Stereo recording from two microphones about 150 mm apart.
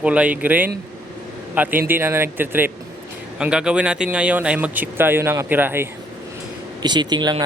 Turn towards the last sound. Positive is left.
turn(degrees=-30)  # may be behind; listen again after turning